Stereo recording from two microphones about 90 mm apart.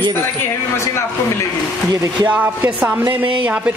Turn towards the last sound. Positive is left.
turn(degrees=-15)  # may be behind; listen again after turning